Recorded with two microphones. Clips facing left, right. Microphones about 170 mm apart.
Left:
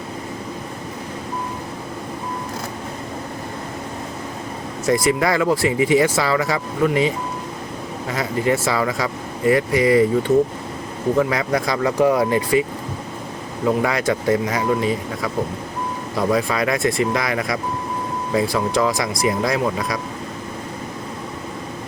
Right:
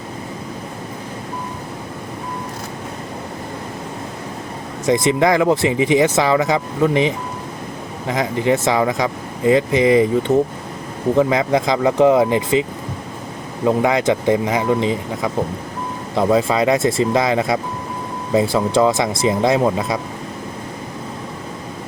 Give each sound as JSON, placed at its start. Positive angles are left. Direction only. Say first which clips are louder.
{"t": 4.9, "sound": "speech", "louder": "right 3 dB", "side_deg": -20}
{"t": 13.7, "sound": "speech", "louder": "right 3 dB", "side_deg": -20}